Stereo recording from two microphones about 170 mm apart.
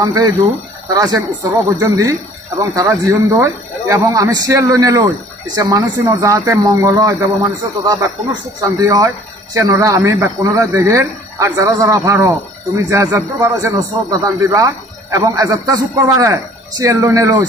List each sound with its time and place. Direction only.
0.0 s speech: 20° right (ahead or behind)